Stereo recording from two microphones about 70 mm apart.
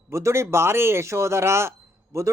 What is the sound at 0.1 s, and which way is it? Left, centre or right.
A man's voice, right.